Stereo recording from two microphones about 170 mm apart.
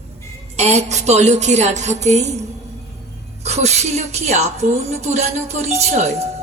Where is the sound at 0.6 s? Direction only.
40° right (ahead or behind).